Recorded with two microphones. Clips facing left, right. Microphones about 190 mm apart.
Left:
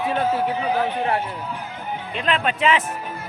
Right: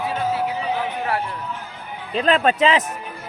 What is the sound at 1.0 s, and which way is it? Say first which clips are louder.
Speech: left 1 dB; 25° left (ahead or behind).